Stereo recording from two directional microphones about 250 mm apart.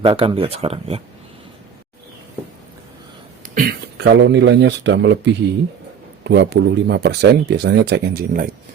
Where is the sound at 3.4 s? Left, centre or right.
Right.